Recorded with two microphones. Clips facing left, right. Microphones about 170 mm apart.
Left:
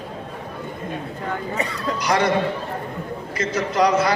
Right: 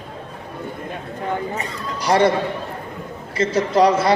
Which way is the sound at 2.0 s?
30° right (ahead or behind).